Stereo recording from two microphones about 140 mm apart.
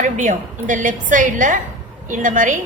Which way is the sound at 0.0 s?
65° right (ahead or behind).